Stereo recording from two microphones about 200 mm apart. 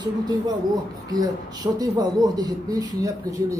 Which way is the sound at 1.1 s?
20° right (ahead or behind).